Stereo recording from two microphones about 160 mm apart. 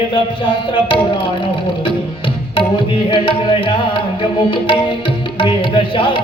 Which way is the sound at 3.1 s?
30° left (ahead or behind).